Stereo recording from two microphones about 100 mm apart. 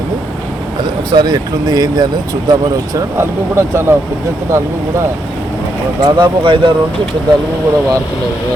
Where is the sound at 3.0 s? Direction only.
25° right (ahead or behind).